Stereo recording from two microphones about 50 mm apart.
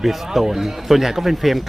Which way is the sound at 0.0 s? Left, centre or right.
Centre.